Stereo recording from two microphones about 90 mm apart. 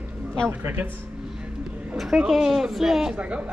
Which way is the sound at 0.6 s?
25° right (ahead or behind).